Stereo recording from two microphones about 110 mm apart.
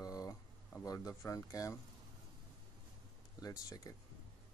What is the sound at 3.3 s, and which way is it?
Speech, 30° left (ahead or behind).